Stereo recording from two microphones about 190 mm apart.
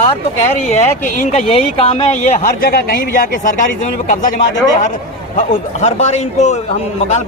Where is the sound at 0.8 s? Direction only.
35° left (ahead or behind).